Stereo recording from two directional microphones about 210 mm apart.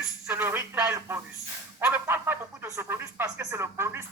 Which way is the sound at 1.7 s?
10° right (ahead or behind).